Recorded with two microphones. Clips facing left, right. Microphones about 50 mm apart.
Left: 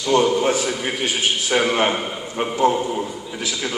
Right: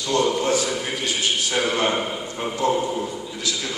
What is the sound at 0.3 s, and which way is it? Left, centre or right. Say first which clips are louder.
A man's voice: left 2 dB; left.